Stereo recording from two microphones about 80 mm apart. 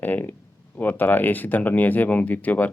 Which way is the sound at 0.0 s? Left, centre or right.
Left.